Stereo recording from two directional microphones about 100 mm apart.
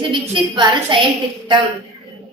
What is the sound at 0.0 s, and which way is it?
A woman's voice, 55° right (ahead or behind).